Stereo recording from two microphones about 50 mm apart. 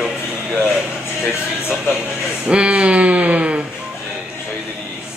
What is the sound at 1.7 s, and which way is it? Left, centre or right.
Speech, centre.